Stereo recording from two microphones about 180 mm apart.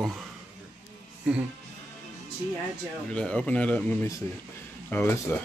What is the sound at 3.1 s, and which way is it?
Speech, 5° left (ahead or behind).